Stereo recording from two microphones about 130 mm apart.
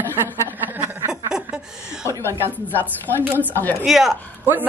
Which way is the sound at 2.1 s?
20° right (ahead or behind).